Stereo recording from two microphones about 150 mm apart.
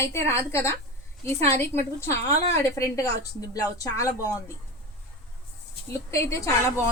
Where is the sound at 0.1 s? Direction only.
20° left (ahead or behind).